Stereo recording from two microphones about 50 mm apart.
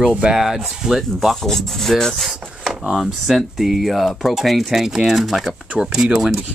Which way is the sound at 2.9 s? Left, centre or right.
Centre.